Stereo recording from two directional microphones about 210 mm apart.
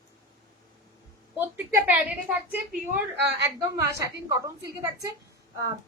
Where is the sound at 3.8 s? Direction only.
15° right (ahead or behind).